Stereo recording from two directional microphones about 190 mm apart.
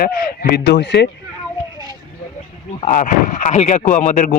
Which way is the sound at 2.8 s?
40° left (ahead or behind).